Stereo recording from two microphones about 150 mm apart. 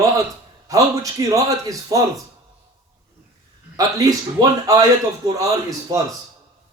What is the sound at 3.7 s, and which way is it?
Speech, 25° right (ahead or behind).